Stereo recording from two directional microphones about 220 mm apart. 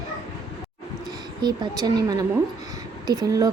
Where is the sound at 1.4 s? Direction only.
20° right (ahead or behind).